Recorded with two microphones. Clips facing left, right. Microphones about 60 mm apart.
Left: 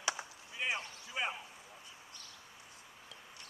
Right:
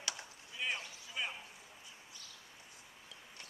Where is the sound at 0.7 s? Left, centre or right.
Left.